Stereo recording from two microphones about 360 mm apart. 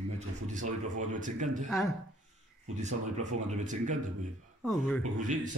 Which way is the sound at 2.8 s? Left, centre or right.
Centre.